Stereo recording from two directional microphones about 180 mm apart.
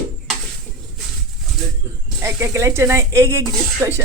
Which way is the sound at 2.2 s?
15° right (ahead or behind).